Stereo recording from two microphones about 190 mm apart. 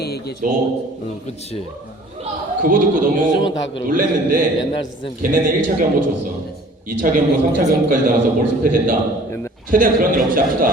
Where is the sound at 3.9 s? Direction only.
45° right (ahead or behind).